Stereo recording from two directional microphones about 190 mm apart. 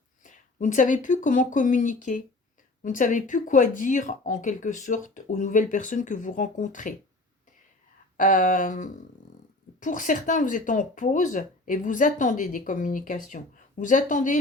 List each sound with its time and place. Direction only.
0.2 s speech: 40° left (ahead or behind)
8.1 s speech: 45° left (ahead or behind)